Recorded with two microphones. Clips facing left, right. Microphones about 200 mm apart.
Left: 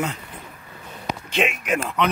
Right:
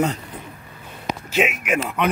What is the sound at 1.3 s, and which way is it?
Speech, 5° right (ahead or behind).